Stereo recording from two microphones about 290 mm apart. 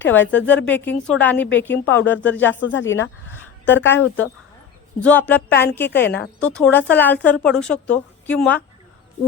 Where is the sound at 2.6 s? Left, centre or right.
Left.